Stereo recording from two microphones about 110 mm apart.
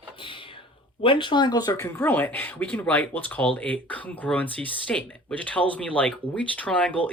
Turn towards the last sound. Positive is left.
turn(degrees=10)  # may be behind; listen again after turning